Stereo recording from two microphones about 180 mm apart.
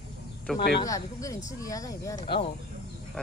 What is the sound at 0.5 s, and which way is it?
Speech, 60° left (ahead or behind).